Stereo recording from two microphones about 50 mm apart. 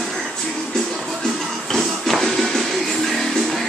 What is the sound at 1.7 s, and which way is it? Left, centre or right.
Music, centre.